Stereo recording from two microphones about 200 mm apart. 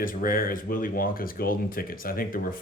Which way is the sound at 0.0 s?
45° left (ahead or behind).